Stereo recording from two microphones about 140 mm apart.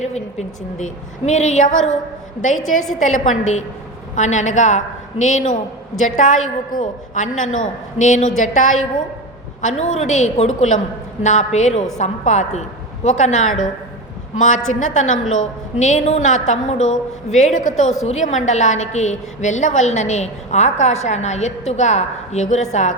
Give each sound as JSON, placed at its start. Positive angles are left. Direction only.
{"t": 0.0, "sound": "a woman's voice", "side_deg": 55}